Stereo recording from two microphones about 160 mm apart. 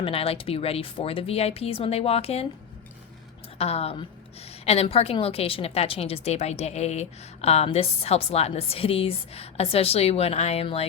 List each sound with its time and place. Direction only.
0.0 s a woman's voice: 35° left (ahead or behind)
3.6 s a woman's voice: 40° left (ahead or behind)